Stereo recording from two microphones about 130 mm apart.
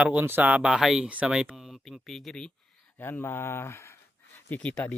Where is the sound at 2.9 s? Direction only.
15° left (ahead or behind).